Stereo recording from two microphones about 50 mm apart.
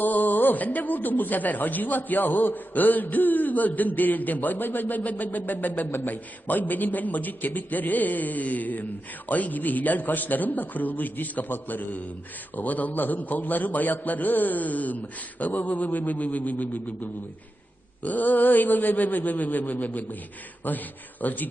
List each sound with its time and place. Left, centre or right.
0.0 s speech: left